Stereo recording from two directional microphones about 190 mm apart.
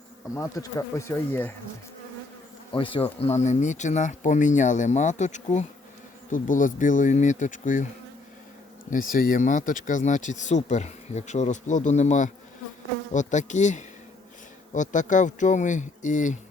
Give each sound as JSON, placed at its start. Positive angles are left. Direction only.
{"t": 0.3, "sound": "speech", "side_deg": 15}
{"t": 2.7, "sound": "speech", "side_deg": 30}
{"t": 8.9, "sound": "speech", "side_deg": 45}